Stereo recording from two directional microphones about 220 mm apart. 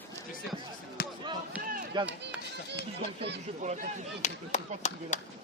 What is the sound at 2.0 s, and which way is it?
Speech, 20° right (ahead or behind).